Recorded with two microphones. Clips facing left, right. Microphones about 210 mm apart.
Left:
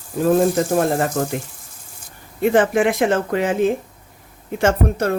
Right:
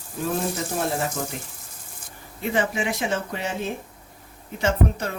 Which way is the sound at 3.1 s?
90° left.